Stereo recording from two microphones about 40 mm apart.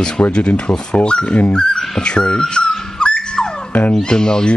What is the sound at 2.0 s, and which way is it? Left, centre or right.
Dog, left.